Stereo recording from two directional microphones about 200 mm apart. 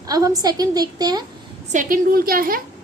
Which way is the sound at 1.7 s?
40° right (ahead or behind).